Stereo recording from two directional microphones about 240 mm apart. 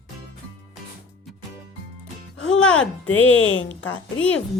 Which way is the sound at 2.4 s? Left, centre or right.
Centre.